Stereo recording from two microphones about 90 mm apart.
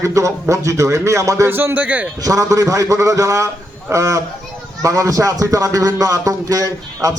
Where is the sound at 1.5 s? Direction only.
20° right (ahead or behind).